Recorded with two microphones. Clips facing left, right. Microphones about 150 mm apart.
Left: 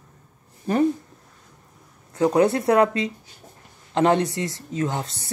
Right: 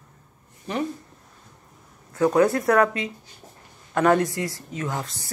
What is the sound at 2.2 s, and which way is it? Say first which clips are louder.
A woman's voice: left 1 dB; 25° left (ahead or behind).